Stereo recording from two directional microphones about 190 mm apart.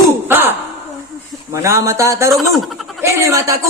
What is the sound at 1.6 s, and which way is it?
A woman's voice, 15° right (ahead or behind).